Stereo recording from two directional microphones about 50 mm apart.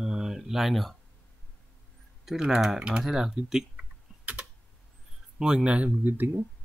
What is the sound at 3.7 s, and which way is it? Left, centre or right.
Typing, right.